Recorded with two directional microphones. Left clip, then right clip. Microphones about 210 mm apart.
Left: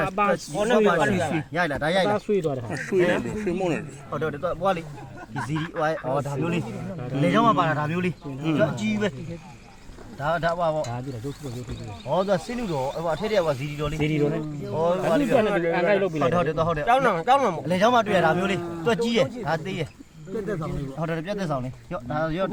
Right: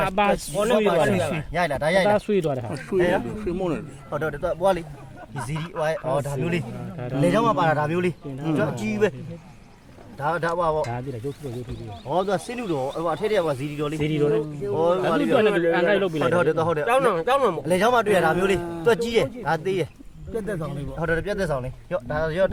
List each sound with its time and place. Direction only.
0.2 s speech: 40° right (ahead or behind)
3.2 s speech: 15° right (ahead or behind)
4.1 s speech: 60° right (ahead or behind)
10.2 s speech: 55° right (ahead or behind)
12.1 s speech: 35° right (ahead or behind)
13.0 s speech: 45° right (ahead or behind)
14.0 s speech: 20° right (ahead or behind)
14.8 s speech: 50° right (ahead or behind)
15.3 s speech: 20° right (ahead or behind)
16.3 s speech: 55° right (ahead or behind)
16.8 s speech: 25° right (ahead or behind)
17.7 s speech: 60° right (ahead or behind)
21.0 s speech: 60° right (ahead or behind)